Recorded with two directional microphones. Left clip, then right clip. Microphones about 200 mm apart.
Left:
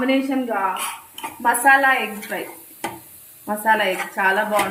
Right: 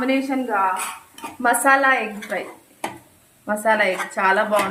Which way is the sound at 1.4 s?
20° right (ahead or behind).